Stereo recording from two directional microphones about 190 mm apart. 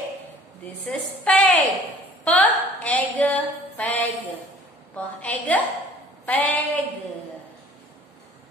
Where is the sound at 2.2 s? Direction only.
5° left (ahead or behind).